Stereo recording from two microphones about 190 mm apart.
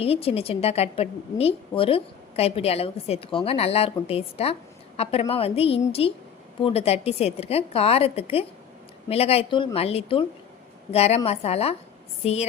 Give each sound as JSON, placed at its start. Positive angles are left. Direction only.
{"t": 0.0, "sound": "a woman's voice", "side_deg": 30}